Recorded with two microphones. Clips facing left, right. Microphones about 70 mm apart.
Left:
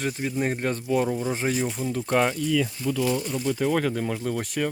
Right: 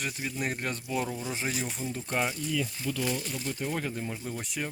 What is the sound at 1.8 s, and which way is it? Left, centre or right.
Speech, left.